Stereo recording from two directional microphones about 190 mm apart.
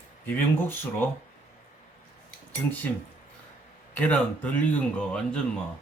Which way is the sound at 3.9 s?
10° left (ahead or behind).